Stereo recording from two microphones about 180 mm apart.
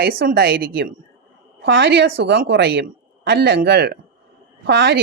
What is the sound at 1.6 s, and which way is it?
A woman's voice, 90° right.